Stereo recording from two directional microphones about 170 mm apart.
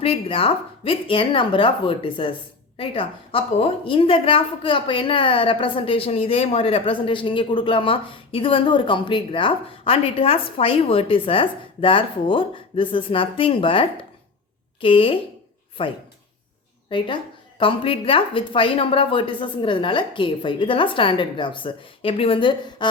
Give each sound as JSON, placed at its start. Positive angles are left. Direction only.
{"t": 0.0, "sound": "a woman's voice", "side_deg": 35}